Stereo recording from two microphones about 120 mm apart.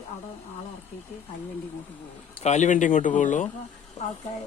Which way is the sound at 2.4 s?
80° left.